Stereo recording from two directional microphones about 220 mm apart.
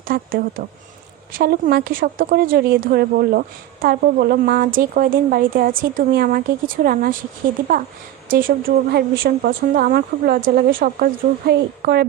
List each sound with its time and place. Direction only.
0.1 s speech: 40° right (ahead or behind)
8.3 s speech: 40° right (ahead or behind)